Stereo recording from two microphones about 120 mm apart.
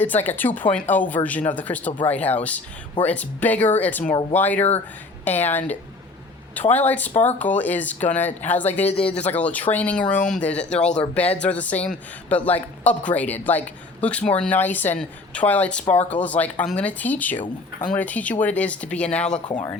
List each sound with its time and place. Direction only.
0.0 s speech: 15° left (ahead or behind)
6.7 s speech: 15° left (ahead or behind)
8.9 s speech: 55° left (ahead or behind)
9.3 s speech: 10° left (ahead or behind)